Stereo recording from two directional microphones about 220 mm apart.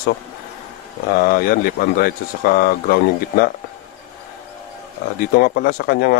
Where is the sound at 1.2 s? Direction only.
40° left (ahead or behind).